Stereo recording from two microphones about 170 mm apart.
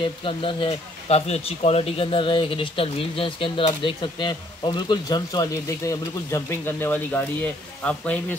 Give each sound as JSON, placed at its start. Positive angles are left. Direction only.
{"t": 0.0, "sound": "speech", "side_deg": 30}